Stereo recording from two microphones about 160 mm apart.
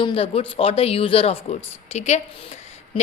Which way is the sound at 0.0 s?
35° left (ahead or behind).